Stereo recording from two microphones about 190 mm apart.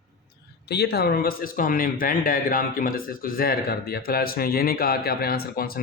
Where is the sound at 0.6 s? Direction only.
60° left (ahead or behind).